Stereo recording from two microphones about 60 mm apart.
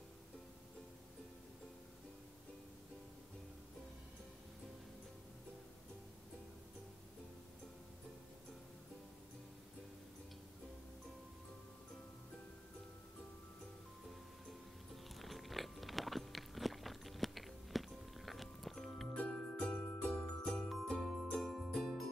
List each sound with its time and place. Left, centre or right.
15.1 s biting: centre
19.1 s music: centre
20.1 s jingle bell: centre
20.6 s jingle bell: centre
21.4 s music: centre